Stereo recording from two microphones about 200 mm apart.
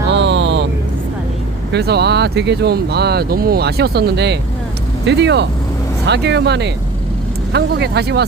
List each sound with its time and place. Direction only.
0.1 s vehicle: 65° right (ahead or behind)
1.7 s speech: 55° right (ahead or behind)